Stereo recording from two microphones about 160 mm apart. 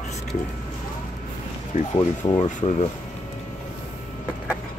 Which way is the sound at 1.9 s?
25° left (ahead or behind).